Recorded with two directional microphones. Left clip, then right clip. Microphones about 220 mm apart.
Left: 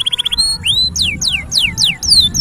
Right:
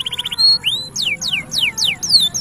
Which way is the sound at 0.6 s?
25° left (ahead or behind).